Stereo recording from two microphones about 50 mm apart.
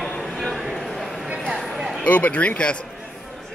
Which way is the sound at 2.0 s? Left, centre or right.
Left.